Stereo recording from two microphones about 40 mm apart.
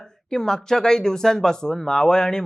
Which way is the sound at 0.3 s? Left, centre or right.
Centre.